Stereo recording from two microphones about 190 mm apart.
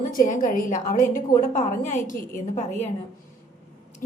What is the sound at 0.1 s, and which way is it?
A woman's voice, 45° left (ahead or behind).